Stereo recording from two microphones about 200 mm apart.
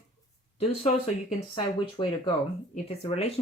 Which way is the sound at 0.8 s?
35° left (ahead or behind).